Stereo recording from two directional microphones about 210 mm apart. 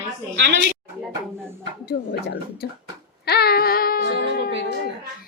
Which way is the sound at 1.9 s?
50° left (ahead or behind).